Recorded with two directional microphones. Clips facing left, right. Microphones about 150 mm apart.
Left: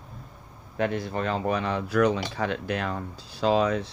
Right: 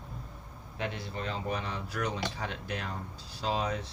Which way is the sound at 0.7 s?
50° left (ahead or behind).